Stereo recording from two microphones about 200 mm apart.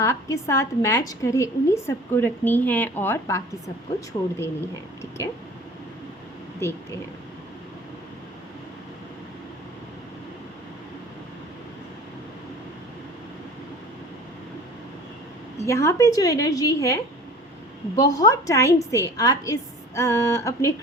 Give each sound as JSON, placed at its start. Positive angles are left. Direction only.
{"t": 0.0, "sound": "a woman's voice", "side_deg": 15}
{"t": 4.1, "sound": "speech", "side_deg": 25}
{"t": 6.6, "sound": "a woman's voice", "side_deg": 15}
{"t": 15.6, "sound": "a woman's voice", "side_deg": 15}